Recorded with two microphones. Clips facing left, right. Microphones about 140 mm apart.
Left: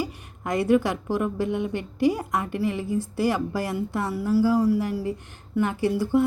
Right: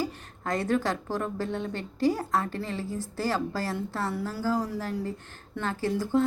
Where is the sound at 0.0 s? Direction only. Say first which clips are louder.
Left 1 dB; 15° left (ahead or behind).